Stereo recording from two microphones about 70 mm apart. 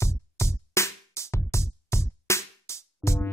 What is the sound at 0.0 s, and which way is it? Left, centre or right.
Music, left.